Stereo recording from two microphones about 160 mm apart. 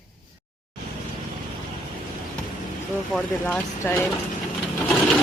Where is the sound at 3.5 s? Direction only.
15° left (ahead or behind).